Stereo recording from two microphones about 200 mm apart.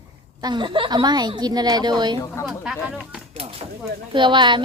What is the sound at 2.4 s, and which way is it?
Speech, 5° right (ahead or behind).